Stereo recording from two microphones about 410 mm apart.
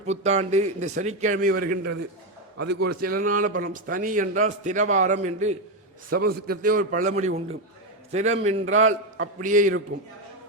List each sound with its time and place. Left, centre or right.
0.0 s a man's voice: centre